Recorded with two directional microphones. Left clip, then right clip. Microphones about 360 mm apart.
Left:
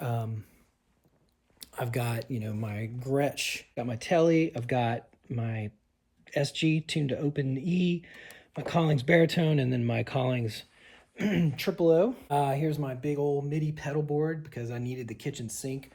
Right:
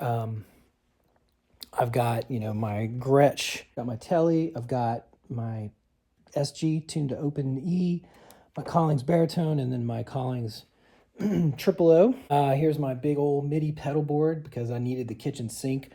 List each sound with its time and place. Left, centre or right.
0.0 s a sound: centre
1.5 s speech: centre
4.5 s speech: centre
8.8 s speech: right
9.4 s speech: centre
11.9 s speech: right